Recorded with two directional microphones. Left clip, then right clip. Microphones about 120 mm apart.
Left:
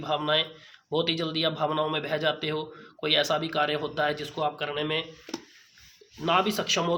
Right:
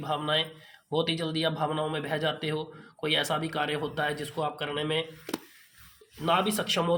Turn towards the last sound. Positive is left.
turn(degrees=35)  # may be behind; listen again after turning